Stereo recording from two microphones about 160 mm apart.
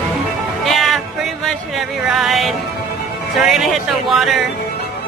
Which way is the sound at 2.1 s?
Centre (ahead or behind).